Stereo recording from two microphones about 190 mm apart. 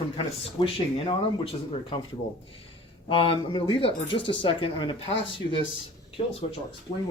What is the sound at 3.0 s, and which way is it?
Speech, 25° left (ahead or behind).